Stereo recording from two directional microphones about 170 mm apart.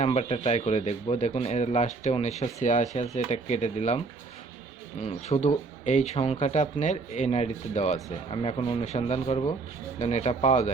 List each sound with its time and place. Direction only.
0.0 s speech: 40° left (ahead or behind)
5.0 s speech: 40° left (ahead or behind)